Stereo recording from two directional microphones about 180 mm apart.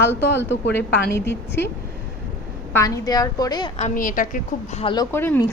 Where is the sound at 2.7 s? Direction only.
20° left (ahead or behind).